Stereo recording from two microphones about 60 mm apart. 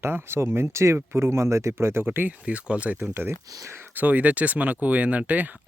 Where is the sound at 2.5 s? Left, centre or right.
Centre.